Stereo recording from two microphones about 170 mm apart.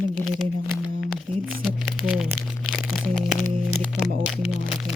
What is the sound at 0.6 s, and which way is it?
Speech, 10° right (ahead or behind).